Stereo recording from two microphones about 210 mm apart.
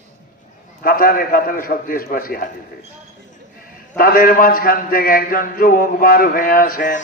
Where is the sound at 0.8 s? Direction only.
45° left (ahead or behind).